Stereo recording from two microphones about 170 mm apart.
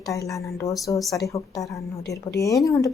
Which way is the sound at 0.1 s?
20° left (ahead or behind).